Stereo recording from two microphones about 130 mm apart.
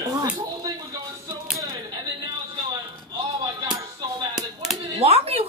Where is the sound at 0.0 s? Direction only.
25° right (ahead or behind).